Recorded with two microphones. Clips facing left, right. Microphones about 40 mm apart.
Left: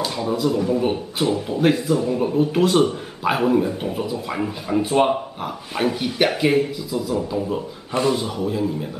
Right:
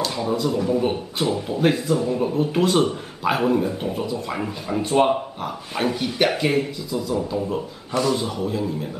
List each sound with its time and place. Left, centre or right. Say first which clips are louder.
0.0 s speech: left 1 dB; centre